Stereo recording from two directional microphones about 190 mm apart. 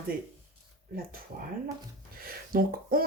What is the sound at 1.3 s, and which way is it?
Speech, 55° right (ahead or behind).